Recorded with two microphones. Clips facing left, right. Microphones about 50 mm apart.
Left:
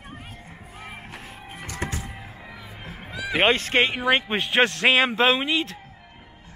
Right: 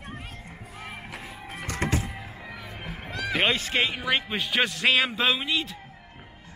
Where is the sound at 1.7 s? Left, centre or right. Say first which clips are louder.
Right 4 dB; right.